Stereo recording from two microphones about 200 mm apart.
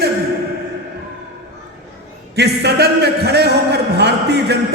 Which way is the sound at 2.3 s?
55° right (ahead or behind).